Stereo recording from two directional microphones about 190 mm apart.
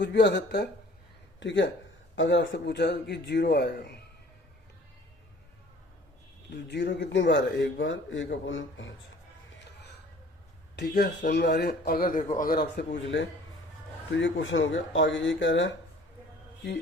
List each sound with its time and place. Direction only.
0.0 s a man's voice: 65° left (ahead or behind)
1.4 s a man's voice: 70° left (ahead or behind)
6.5 s speech: 60° left (ahead or behind); by 8.9 s 80° left
10.8 s a man's voice: 60° left (ahead or behind)